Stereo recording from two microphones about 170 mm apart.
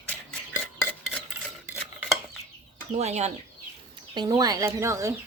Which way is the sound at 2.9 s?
40° right (ahead or behind).